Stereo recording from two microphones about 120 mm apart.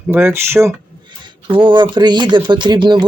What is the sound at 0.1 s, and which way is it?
Speech, 20° right (ahead or behind).